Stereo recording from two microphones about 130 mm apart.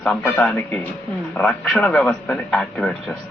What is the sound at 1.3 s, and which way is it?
A man's voice, 5° left (ahead or behind).